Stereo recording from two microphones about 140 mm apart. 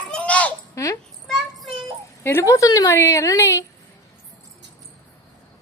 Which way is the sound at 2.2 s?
20° left (ahead or behind).